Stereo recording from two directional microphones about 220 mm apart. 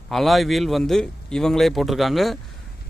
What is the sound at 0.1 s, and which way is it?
A man's voice, centre (ahead or behind).